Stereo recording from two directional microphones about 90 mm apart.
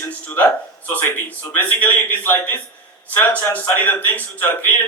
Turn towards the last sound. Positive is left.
turn(degrees=20)  # may be behind; listen again after turning